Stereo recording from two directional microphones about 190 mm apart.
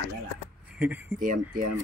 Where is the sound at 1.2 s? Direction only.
45° right (ahead or behind).